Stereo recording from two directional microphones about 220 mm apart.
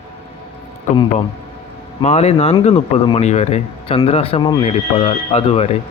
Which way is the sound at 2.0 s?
30° left (ahead or behind).